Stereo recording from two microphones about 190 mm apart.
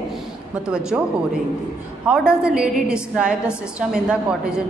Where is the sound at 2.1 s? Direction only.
5° right (ahead or behind).